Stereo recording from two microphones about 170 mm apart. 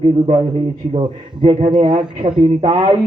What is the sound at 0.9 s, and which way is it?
A man's voice, 30° right (ahead or behind).